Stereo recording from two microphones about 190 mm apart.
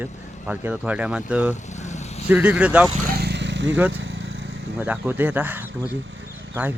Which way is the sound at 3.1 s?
60° right (ahead or behind).